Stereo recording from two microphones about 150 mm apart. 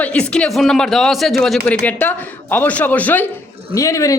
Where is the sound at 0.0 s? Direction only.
10° left (ahead or behind).